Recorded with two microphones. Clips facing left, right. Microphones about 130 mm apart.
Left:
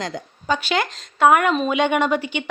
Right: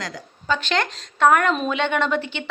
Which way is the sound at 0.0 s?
20° left (ahead or behind).